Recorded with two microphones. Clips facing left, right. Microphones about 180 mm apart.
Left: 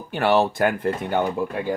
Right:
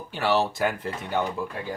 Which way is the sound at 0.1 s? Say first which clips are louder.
Left 5 dB; 55° left (ahead or behind).